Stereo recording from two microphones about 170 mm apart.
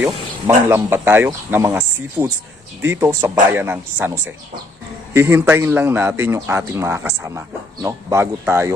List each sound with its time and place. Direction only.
0.0 s speech: 10° right (ahead or behind)